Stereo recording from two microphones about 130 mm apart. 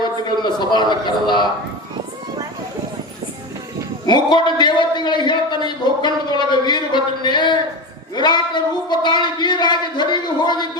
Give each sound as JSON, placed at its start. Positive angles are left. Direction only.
{"t": 0.0, "sound": "a man's voice", "side_deg": 35}
{"t": 4.0, "sound": "a man's voice", "side_deg": 35}